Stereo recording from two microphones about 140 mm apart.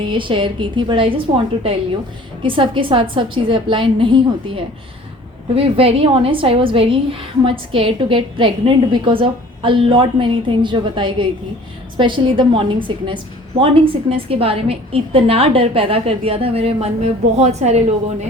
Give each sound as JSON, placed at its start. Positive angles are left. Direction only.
{"t": 0.1, "sound": "a woman's voice", "side_deg": -35}
{"t": 2.4, "sound": "a woman's voice", "side_deg": -35}